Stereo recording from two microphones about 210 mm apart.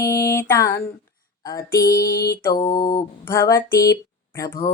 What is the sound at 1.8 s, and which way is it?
Female singing, 15° left (ahead or behind).